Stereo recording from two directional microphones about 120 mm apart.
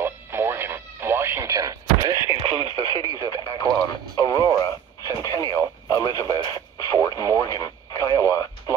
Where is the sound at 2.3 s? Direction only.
50° right (ahead or behind).